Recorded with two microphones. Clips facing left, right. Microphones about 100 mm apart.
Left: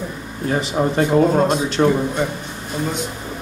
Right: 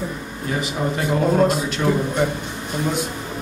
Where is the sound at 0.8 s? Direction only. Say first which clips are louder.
Left 6 dB; 35° left (ahead or behind).